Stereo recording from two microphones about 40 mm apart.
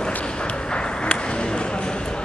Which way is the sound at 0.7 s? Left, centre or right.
Left.